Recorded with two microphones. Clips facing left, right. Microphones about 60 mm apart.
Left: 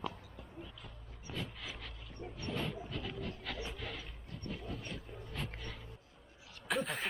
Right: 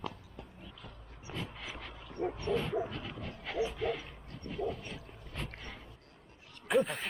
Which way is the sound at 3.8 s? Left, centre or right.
Centre.